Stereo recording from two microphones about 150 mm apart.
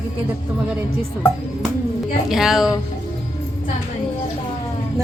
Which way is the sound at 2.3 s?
Centre (ahead or behind).